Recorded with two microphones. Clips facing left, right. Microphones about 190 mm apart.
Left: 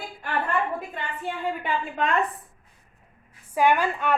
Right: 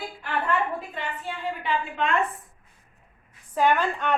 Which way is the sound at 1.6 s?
45° left (ahead or behind).